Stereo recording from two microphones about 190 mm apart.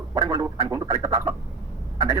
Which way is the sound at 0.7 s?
15° right (ahead or behind).